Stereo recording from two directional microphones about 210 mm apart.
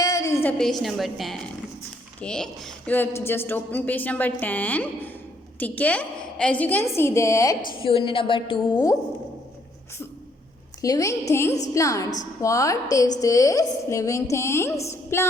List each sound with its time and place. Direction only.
0.0 s a sound: 15° left (ahead or behind)
0.6 s a woman's voice: centre (ahead or behind)
7.8 s a woman's voice: 25° left (ahead or behind)
10.8 s a woman's voice: 15° left (ahead or behind)